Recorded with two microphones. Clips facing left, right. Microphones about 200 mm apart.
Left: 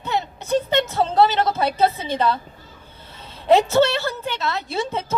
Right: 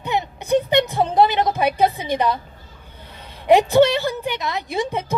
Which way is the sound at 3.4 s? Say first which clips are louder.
Right 2 dB; 15° right (ahead or behind).